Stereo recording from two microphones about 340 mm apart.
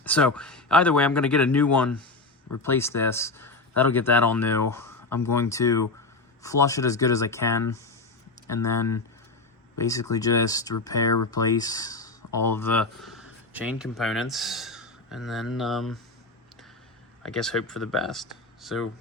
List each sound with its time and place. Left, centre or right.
0.0 s speech: centre
17.2 s speech: centre